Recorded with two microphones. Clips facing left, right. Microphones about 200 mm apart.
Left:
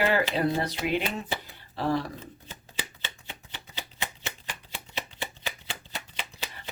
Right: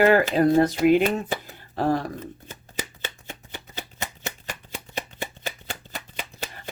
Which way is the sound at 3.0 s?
45° right (ahead or behind).